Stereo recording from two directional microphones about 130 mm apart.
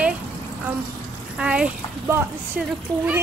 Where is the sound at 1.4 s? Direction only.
5° right (ahead or behind).